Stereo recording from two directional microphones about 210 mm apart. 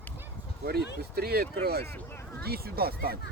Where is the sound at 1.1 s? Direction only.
50° right (ahead or behind).